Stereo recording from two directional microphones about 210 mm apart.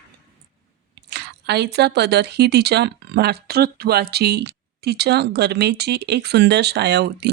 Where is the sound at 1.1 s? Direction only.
50° right (ahead or behind).